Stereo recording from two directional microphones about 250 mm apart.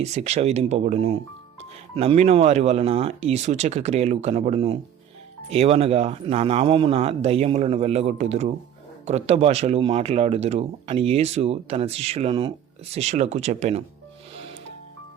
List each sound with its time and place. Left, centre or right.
0.0 s speech: right